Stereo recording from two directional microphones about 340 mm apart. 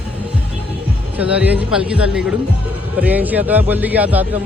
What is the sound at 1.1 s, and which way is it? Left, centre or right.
A man's voice, centre.